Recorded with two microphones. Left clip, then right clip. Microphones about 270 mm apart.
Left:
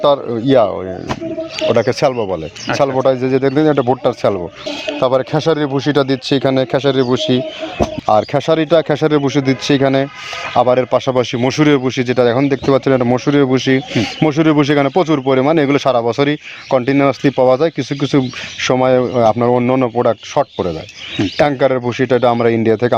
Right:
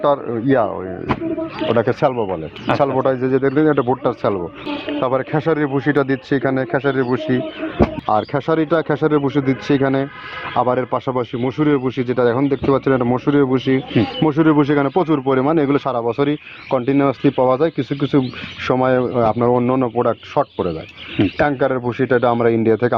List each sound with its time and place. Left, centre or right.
0.0 s speech: left
1.7 s speech: left